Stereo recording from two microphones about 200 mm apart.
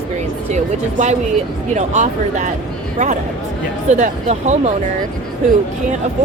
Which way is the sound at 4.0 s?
35° right (ahead or behind).